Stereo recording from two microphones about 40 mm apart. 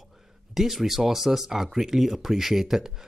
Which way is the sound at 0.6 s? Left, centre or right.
Centre.